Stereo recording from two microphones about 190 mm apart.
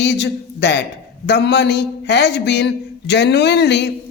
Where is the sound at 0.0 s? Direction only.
65° left (ahead or behind).